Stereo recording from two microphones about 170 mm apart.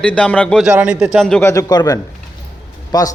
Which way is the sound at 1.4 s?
20° left (ahead or behind).